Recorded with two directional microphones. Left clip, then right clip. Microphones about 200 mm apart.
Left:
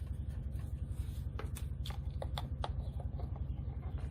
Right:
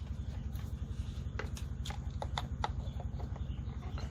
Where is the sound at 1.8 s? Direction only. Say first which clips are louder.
Right 3 dB; 5° left (ahead or behind).